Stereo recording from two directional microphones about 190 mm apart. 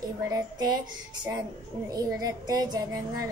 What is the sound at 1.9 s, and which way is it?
A woman's voice, 20° right (ahead or behind).